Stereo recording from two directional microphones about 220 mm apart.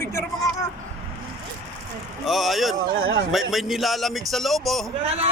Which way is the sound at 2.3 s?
Centre (ahead or behind).